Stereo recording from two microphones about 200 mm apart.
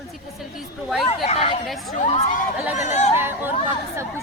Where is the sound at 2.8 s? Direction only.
35° left (ahead or behind).